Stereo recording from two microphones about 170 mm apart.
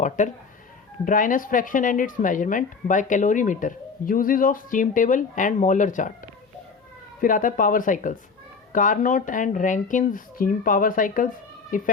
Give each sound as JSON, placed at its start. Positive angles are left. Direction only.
{"t": 0.0, "sound": "speech", "side_deg": 45}
{"t": 7.2, "sound": "speech", "side_deg": 55}